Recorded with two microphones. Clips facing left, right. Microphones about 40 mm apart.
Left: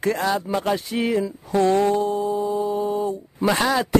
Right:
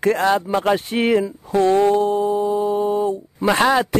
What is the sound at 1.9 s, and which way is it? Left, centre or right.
Speech, right.